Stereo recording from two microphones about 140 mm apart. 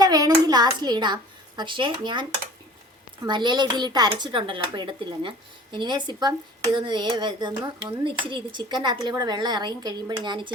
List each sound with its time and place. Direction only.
0.0 s a child's voice: 30° right (ahead or behind)
3.2 s speech: 35° right (ahead or behind)